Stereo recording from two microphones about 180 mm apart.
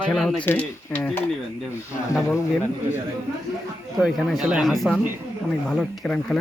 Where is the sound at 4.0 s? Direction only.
Centre (ahead or behind).